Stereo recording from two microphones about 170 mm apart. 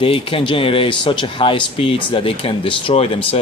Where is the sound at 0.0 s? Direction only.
30° left (ahead or behind).